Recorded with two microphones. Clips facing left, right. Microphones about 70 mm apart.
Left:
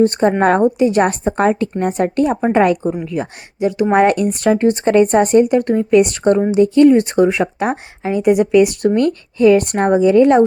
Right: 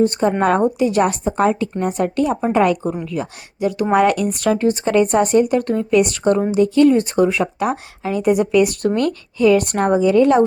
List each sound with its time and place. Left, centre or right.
0.0 s speech: left
0.8 s speech: left